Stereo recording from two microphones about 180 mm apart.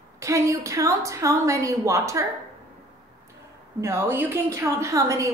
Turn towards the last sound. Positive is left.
turn(degrees=-15)  # may be behind; listen again after turning